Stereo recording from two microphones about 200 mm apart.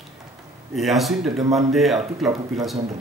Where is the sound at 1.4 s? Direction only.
15° right (ahead or behind).